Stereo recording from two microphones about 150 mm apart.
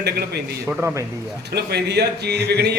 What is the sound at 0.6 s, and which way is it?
Speech, 10° right (ahead or behind).